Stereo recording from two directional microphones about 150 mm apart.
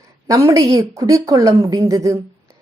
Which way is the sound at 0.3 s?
20° right (ahead or behind).